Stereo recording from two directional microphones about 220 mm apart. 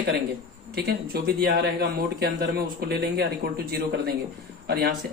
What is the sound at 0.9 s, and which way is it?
Speech, 45° right (ahead or behind).